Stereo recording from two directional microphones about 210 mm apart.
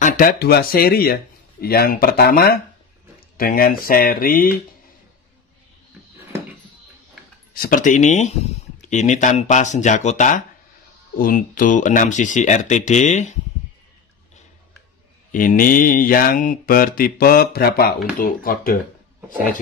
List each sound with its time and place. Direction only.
0.0 s speech: 45° left (ahead or behind)
7.5 s speech: 40° left (ahead or behind)
15.3 s speech: 40° left (ahead or behind)